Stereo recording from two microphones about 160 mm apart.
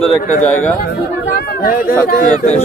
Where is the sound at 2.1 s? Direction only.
55° left (ahead or behind).